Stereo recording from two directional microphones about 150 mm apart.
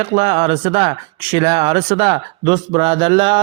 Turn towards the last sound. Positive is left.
turn(degrees=-35)  # may be behind; listen again after turning